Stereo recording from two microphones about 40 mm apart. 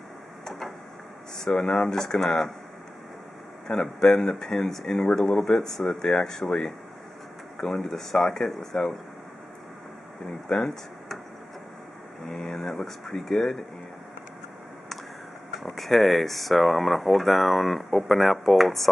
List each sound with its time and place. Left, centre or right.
0.5 s tick-tock: centre
1.4 s speech: centre
3.7 s speech: centre
7.5 s speech: centre
10.5 s speech: centre
12.4 s speech: centre
15.6 s speech: centre